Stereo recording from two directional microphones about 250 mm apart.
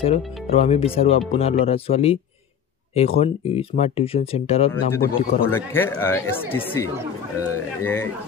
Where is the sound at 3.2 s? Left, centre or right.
Left.